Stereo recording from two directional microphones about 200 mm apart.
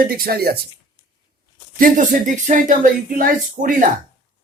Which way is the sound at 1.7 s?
40° right (ahead or behind).